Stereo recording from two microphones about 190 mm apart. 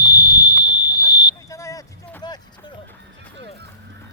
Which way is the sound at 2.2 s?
25° left (ahead or behind).